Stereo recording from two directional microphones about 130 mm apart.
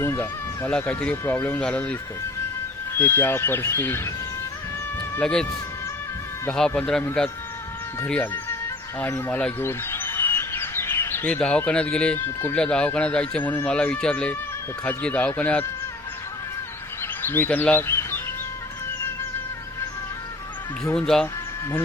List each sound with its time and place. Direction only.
0.0 s chicken: 20° left (ahead or behind)
0.7 s speech: 10° left (ahead or behind)
5.2 s speech: 5° left (ahead or behind)
6.5 s speech: 5° left (ahead or behind)
9.4 s chirp: 15° left (ahead or behind)
12.5 s speech: 5° left (ahead or behind)
17.0 s speech: 15° left (ahead or behind)
20.9 s speech: 5° left (ahead or behind)